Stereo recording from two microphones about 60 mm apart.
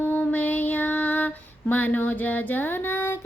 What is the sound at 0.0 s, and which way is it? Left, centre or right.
Female singing, left.